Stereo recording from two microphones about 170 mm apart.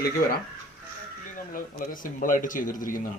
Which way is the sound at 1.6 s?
55° left (ahead or behind).